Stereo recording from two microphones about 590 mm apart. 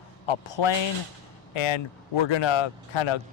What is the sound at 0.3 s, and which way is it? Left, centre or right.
Speech, left.